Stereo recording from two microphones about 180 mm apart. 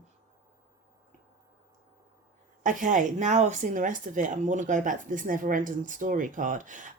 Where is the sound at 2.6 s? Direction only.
45° right (ahead or behind).